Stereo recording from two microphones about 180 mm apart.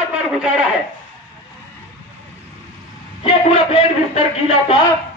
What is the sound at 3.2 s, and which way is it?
A man's voice, 35° left (ahead or behind).